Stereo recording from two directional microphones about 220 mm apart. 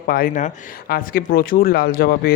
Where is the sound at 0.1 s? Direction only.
40° left (ahead or behind).